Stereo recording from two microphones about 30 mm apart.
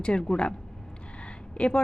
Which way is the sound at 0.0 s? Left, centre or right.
Left.